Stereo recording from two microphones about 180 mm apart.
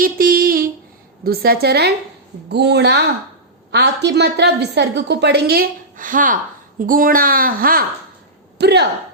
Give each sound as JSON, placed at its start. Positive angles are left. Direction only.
{"t": 0.0, "sound": "a sound", "side_deg": -55}
{"t": 1.2, "sound": "a woman's voice", "side_deg": -55}
{"t": 8.5, "sound": "speech", "side_deg": -70}